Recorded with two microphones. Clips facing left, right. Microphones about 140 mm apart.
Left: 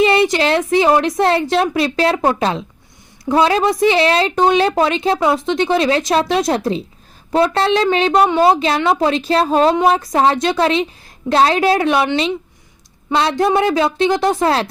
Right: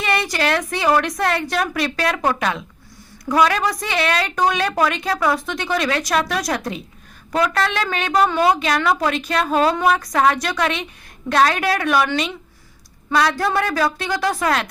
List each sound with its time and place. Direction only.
0.0 s a woman's voice: 25° left (ahead or behind)